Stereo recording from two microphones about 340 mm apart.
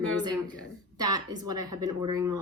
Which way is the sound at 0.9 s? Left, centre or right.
Centre.